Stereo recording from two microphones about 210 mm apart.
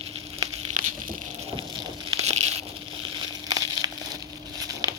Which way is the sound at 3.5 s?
15° right (ahead or behind).